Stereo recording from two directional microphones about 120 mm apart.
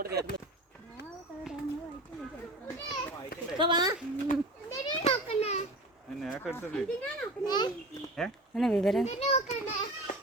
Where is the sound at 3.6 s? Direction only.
35° right (ahead or behind).